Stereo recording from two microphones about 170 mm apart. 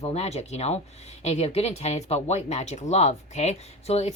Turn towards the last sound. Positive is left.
turn(degrees=40)  # may be behind; listen again after turning